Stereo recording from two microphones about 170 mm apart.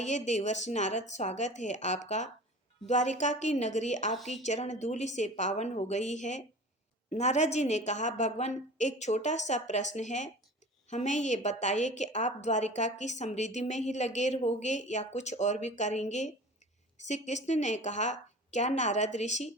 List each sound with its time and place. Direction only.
0.0 s a woman's voice: 45° left (ahead or behind)